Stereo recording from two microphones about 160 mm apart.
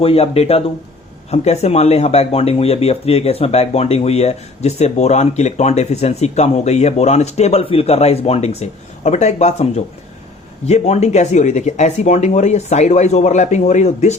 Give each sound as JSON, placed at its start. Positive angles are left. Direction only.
{"t": 0.0, "sound": "speech", "side_deg": 40}